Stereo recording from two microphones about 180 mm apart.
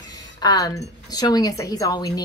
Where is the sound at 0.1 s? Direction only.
20° left (ahead or behind).